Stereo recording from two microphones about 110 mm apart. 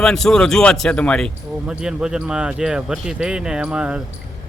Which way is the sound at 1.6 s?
5° right (ahead or behind).